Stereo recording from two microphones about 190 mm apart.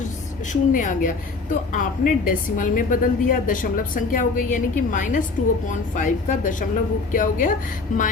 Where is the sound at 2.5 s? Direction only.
45° left (ahead or behind).